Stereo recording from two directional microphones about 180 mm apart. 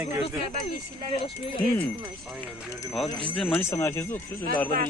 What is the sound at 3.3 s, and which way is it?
Speech, 10° left (ahead or behind).